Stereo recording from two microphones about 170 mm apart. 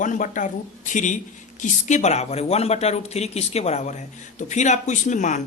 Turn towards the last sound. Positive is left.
turn(degrees=45)  # may be behind; listen again after turning